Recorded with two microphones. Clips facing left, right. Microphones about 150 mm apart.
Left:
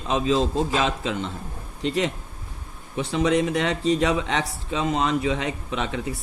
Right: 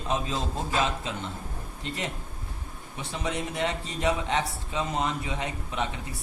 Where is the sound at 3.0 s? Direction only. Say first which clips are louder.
Left 11 dB; 90° left.